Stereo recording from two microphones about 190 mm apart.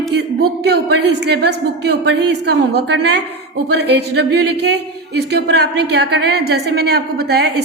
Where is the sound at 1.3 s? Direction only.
60° right (ahead or behind).